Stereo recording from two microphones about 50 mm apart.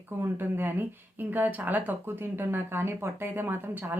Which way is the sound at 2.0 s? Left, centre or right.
Right.